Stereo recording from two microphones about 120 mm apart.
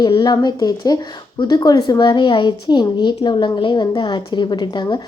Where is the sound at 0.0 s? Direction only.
35° left (ahead or behind).